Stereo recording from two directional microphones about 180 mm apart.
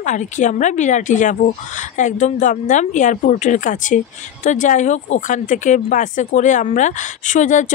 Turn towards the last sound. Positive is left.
turn(degrees=45)  # may be behind; listen again after turning